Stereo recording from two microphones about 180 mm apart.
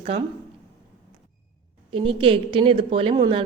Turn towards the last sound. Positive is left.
turn(degrees=-25)  # may be behind; listen again after turning